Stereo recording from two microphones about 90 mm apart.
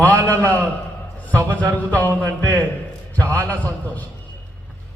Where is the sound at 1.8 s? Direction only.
20° left (ahead or behind).